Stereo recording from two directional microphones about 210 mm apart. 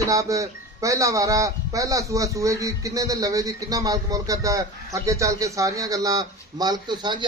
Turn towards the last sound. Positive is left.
turn(degrees=-20)  # may be behind; listen again after turning